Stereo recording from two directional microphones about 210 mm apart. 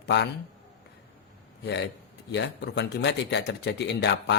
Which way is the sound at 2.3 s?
55° left (ahead or behind).